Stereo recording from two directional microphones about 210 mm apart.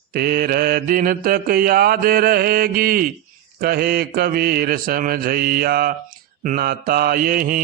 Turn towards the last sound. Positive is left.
turn(degrees=-40)  # may be behind; listen again after turning